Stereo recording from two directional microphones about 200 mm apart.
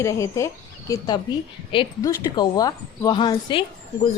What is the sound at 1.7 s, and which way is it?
A woman's voice, 25° left (ahead or behind).